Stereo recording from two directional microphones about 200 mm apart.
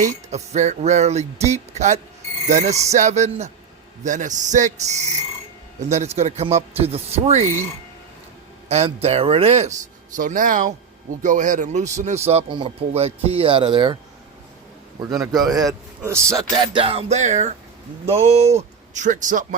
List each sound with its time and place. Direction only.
0.0 s speech: 35° right (ahead or behind)
8.7 s a man's voice: 30° right (ahead or behind)
15.0 s a man's voice: 15° right (ahead or behind); by 19.5 s 40° right (ahead or behind)